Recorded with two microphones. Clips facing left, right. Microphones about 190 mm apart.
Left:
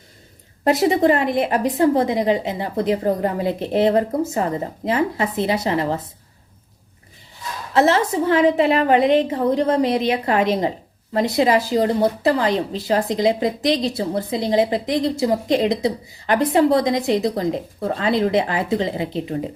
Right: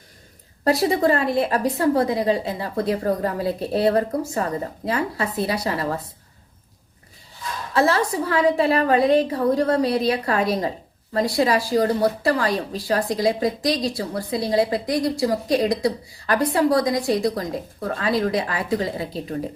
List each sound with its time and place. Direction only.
0.6 s speech: 20° left (ahead or behind)
7.7 s speech: 20° left (ahead or behind)